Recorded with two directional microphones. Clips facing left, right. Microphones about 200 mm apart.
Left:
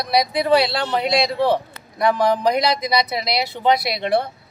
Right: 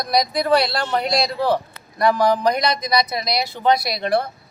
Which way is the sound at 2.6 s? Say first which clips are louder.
Left 1 dB; 25° left (ahead or behind).